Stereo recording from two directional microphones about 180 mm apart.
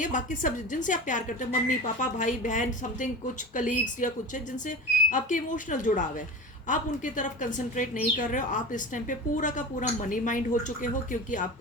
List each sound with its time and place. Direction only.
0.0 s a woman's voice: 45° left (ahead or behind)
5.1 s a woman's voice: 45° left (ahead or behind)